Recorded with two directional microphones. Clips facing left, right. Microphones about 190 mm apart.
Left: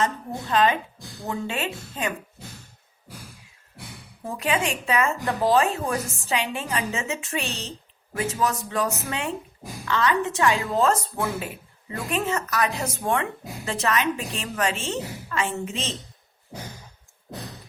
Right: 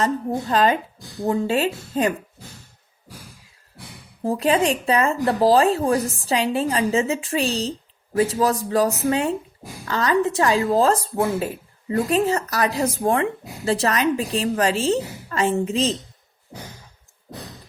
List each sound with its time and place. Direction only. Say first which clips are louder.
0.0 s speech: right 5 dB; 35° right (ahead or behind)
4.2 s speech: right 7 dB; 35° right (ahead or behind)